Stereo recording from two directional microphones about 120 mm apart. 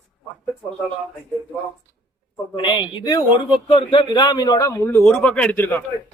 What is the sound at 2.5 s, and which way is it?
Speech, 45° left (ahead or behind).